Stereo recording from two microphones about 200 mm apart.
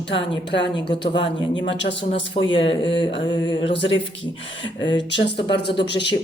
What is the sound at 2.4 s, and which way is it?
Speech, 30° left (ahead or behind).